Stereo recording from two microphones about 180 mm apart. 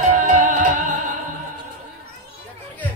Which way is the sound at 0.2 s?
45° right (ahead or behind).